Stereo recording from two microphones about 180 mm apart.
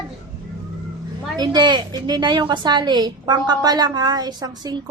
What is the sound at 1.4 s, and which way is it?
A woman's voice, 25° right (ahead or behind).